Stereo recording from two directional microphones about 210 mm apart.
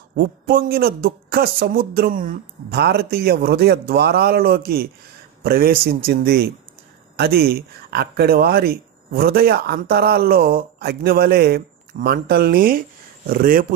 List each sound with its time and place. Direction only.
0.1 s speech: 45° right (ahead or behind)